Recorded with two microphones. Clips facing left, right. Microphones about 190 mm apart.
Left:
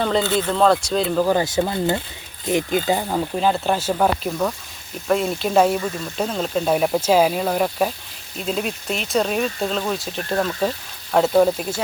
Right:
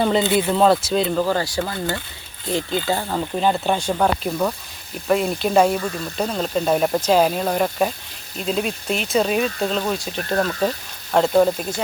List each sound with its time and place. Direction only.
0.0 s speech: 15° right (ahead or behind)
1.2 s speech: 15° left (ahead or behind)
3.3 s speech: centre (ahead or behind)